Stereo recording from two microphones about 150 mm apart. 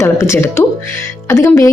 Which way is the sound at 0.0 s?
20° left (ahead or behind).